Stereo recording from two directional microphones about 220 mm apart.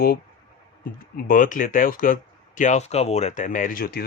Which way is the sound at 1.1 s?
40° left (ahead or behind).